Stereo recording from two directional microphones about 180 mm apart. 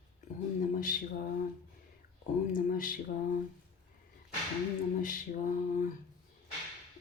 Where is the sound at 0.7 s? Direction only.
50° left (ahead or behind).